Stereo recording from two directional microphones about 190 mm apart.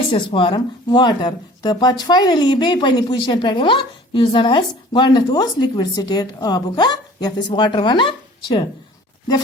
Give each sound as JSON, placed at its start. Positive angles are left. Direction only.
{"t": 0.1, "sound": "speech", "side_deg": 25}